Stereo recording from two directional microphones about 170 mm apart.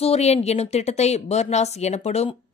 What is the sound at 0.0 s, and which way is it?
Speech, 40° left (ahead or behind).